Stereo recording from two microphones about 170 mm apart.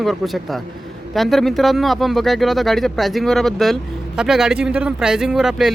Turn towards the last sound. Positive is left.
turn(degrees=0)  # may be behind; listen again after turning